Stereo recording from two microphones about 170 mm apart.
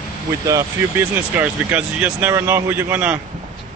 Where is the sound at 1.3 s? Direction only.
10° right (ahead or behind).